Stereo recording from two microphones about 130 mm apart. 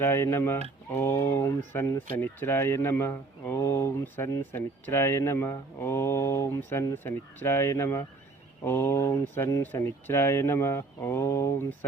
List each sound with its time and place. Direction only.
0.0 s speech: 20° left (ahead or behind)